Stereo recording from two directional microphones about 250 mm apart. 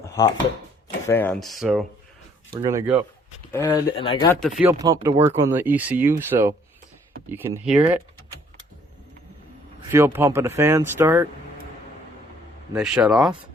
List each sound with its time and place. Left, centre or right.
0.1 s speech: centre
2.5 s speech: centre
3.5 s speech: centre
4.3 s speech: centre
4.6 s speech: centre
9.9 s speech: centre
12.7 s speech: centre